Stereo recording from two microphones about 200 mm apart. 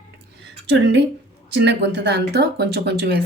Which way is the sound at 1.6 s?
55° right (ahead or behind).